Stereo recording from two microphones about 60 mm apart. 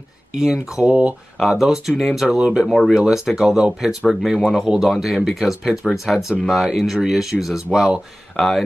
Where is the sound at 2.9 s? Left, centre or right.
Centre.